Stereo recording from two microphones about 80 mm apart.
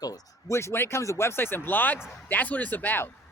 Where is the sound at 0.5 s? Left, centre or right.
Left.